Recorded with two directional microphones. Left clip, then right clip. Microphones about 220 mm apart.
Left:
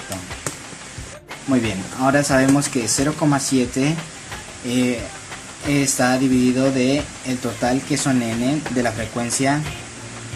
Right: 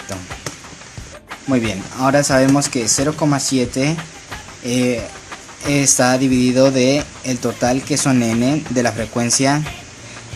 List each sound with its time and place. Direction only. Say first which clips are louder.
1.5 s speech: right 2 dB; 25° right (ahead or behind)